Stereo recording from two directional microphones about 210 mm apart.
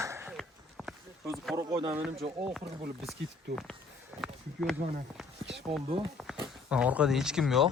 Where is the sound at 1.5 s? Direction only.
25° right (ahead or behind).